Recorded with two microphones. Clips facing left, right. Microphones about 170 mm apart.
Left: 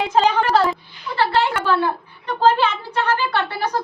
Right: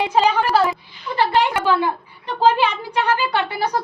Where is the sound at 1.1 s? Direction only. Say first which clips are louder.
Right 1 dB; 15° right (ahead or behind).